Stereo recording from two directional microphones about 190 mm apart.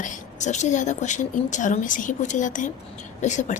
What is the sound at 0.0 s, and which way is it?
A woman's voice, 40° left (ahead or behind).